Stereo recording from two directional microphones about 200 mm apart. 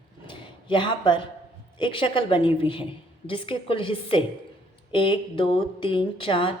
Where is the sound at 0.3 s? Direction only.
25° left (ahead or behind).